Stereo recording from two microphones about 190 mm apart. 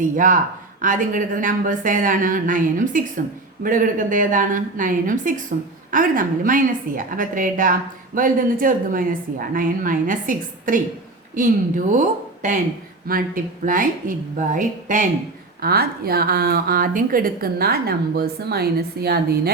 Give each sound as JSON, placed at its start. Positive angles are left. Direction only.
{"t": 0.0, "sound": "a woman's voice", "side_deg": -45}
{"t": 11.9, "sound": "a woman's voice", "side_deg": -40}
{"t": 15.6, "sound": "a woman's voice", "side_deg": -55}